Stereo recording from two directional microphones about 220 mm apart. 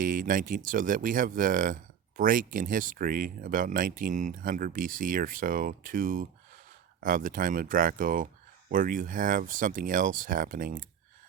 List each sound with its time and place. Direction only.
0.0 s speech: 40° right (ahead or behind)